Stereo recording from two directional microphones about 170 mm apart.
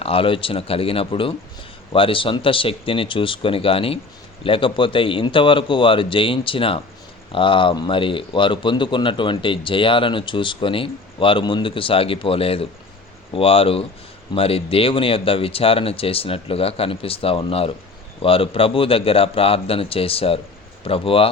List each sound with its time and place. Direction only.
0.0 s speech: 35° left (ahead or behind)